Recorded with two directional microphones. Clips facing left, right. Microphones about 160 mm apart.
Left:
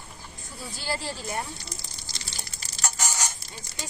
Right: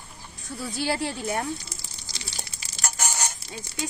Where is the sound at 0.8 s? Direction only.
65° right (ahead or behind).